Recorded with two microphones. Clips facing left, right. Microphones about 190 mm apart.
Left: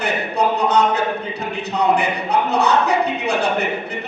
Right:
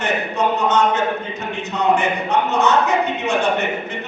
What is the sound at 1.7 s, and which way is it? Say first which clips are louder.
Speech: even; 35° left (ahead or behind).